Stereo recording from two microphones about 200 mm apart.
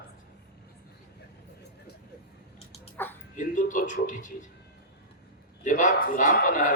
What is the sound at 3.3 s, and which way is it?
A man's voice, 40° left (ahead or behind).